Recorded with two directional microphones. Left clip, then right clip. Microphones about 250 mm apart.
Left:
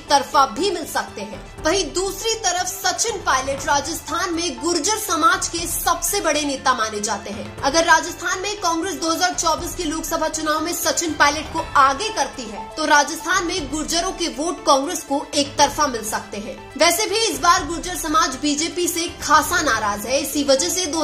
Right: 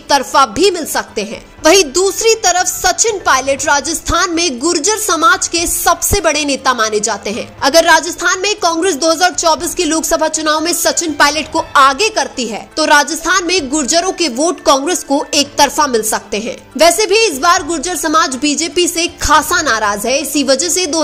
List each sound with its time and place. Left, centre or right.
0.1 s a woman's voice: right